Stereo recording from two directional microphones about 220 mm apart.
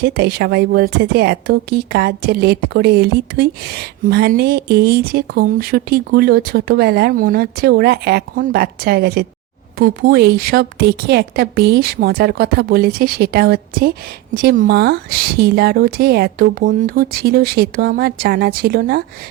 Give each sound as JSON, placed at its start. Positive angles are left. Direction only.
{"t": 0.0, "sound": "a woman's voice", "side_deg": -45}